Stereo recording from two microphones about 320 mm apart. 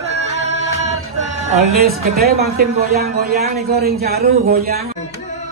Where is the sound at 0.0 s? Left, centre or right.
Centre.